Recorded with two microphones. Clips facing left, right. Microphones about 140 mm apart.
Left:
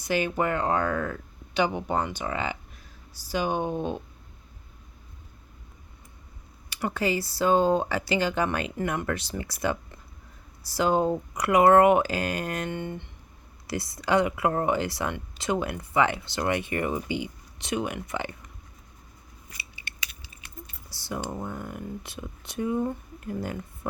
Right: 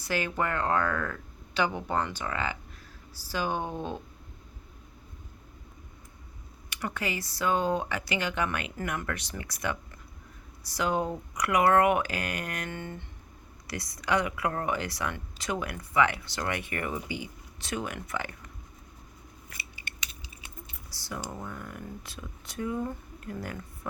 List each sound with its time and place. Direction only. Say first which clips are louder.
0.0 s speech: left 4 dB; 20° left (ahead or behind)
6.7 s speech: left 6 dB; 30° left (ahead or behind)
20.9 s speech: left 5 dB; 25° left (ahead or behind)